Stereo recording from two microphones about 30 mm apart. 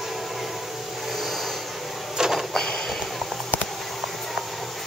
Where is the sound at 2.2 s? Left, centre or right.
Right.